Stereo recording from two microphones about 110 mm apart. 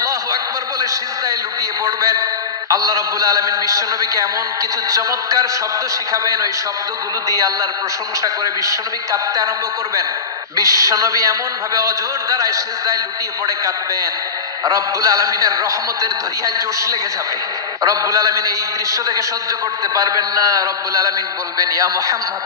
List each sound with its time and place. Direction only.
0.0 s a sound: 30° right (ahead or behind)
2.7 s a man's voice: 30° right (ahead or behind)
10.6 s a man's voice: 30° right (ahead or behind)
14.6 s a man's voice: 35° right (ahead or behind)